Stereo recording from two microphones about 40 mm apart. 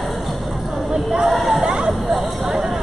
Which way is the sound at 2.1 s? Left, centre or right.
Centre.